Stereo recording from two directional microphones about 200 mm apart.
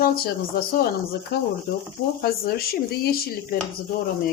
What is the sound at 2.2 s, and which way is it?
Speech, 50° left (ahead or behind).